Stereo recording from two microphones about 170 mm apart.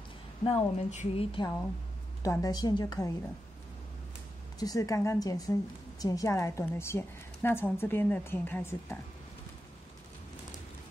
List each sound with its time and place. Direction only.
0.4 s speech: 40° left (ahead or behind)
2.2 s a woman's voice: 20° left (ahead or behind)
4.6 s a woman's voice: 20° left (ahead or behind)